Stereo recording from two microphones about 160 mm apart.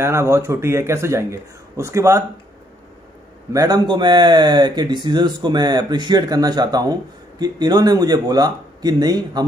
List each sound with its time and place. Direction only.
0.0 s speech: 15° right (ahead or behind)
3.5 s speech: 25° right (ahead or behind)